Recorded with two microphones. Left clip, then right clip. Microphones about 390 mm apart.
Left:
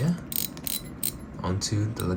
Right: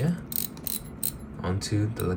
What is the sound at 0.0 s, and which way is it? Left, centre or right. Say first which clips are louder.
Mechanisms: left 1 dB; centre.